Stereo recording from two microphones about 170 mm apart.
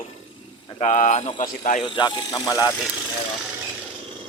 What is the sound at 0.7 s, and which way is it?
Speech, 45° left (ahead or behind).